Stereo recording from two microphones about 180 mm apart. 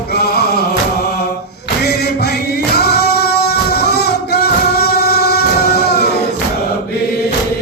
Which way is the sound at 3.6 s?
65° left (ahead or behind).